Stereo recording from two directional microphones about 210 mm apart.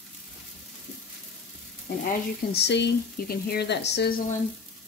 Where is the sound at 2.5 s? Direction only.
55° left (ahead or behind).